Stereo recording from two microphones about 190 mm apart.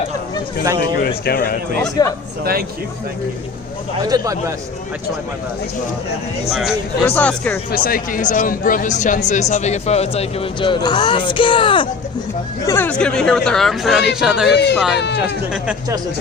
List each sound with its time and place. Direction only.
0.8 s speech: 55° left (ahead or behind)
2.0 s speech: 20° left (ahead or behind)
2.4 s a man's voice: 55° right (ahead or behind)
4.1 s a man's voice: 20° right (ahead or behind)
6.5 s speech: centre (ahead or behind)
7.9 s speech: 45° left (ahead or behind); by 11.9 s 25° left (ahead or behind)
12.6 s speech: 10° left (ahead or behind)
14.5 s speech: 60° left (ahead or behind)